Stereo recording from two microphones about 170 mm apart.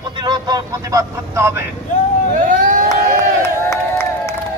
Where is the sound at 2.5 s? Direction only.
50° right (ahead or behind).